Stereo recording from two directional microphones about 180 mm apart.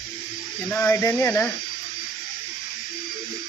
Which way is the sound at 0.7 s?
10° left (ahead or behind).